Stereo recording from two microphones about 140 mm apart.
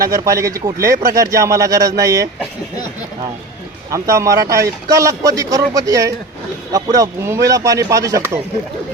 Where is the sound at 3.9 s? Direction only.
20° right (ahead or behind).